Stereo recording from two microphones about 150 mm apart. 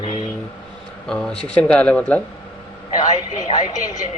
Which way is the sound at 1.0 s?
5° left (ahead or behind).